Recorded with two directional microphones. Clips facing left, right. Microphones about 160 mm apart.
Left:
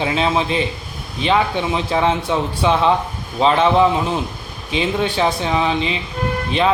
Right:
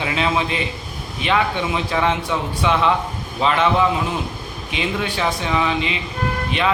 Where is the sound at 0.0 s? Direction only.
30° left (ahead or behind).